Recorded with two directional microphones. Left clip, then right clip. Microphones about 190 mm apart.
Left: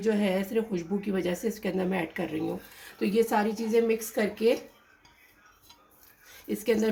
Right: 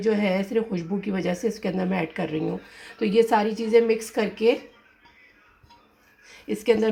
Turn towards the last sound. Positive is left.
turn(degrees=-20)  # may be behind; listen again after turning